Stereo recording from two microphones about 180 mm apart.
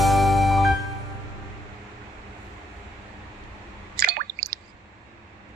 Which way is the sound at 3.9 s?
55° right (ahead or behind).